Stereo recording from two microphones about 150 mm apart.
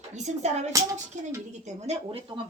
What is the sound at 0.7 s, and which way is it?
Speech, 20° right (ahead or behind).